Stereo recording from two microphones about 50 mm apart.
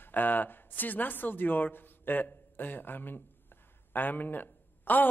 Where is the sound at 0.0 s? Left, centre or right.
Left.